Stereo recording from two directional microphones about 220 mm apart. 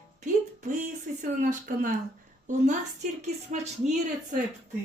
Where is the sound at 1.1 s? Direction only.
35° right (ahead or behind).